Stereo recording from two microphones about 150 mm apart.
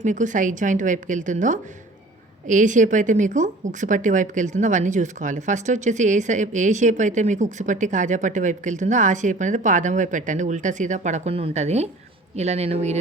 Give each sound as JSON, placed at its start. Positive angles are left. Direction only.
{"t": 0.0, "sound": "speech", "side_deg": -55}